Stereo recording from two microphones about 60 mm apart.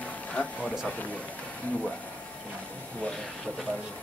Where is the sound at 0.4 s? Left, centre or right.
Left.